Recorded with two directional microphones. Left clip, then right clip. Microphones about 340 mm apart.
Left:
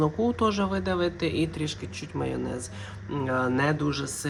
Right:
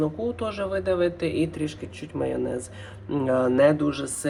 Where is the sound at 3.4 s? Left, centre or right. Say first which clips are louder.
Right 7 dB; centre.